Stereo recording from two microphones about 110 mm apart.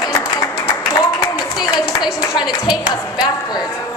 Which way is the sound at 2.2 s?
40° left (ahead or behind).